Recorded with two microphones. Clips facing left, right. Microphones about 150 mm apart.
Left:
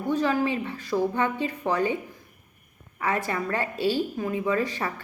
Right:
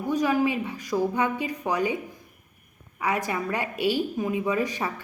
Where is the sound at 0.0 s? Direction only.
10° right (ahead or behind).